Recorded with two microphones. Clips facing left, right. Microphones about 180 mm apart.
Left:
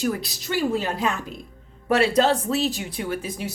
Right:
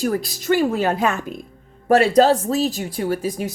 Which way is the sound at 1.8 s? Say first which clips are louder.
Right 5 dB; 40° right (ahead or behind).